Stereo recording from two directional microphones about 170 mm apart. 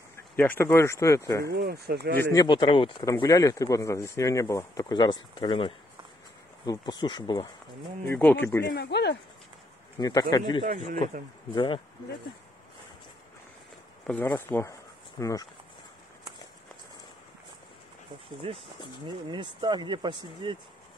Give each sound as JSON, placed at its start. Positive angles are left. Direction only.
{"t": 0.4, "sound": "speech", "side_deg": 15}
{"t": 1.4, "sound": "speech", "side_deg": -70}
{"t": 2.1, "sound": "speech", "side_deg": 10}
{"t": 2.4, "sound": "speech", "side_deg": 30}
{"t": 8.1, "sound": "speech", "side_deg": 10}
{"t": 8.6, "sound": "speech", "side_deg": 75}
{"t": 9.9, "sound": "speech", "side_deg": 25}
{"t": 11.5, "sound": "speech", "side_deg": 30}
{"t": 14.0, "sound": "speech", "side_deg": 10}
{"t": 18.4, "sound": "speech", "side_deg": -35}